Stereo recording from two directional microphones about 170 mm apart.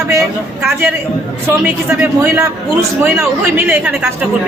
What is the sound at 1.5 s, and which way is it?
A woman's voice, 10° right (ahead or behind).